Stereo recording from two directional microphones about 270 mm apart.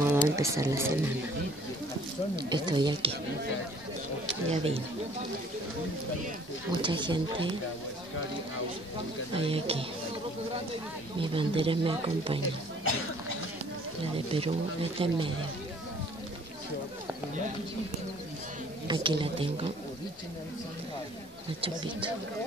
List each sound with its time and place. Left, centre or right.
0.1 s speech: centre
2.3 s speech: centre
4.5 s speech: right
6.8 s speech: centre
9.3 s speech: right
11.1 s speech: centre
14.1 s speech: right
18.9 s speech: centre
21.5 s speech: centre